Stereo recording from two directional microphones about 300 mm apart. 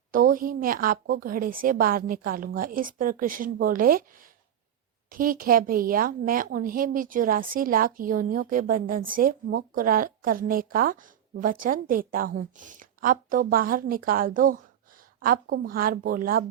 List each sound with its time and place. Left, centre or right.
0.1 s a woman's voice: right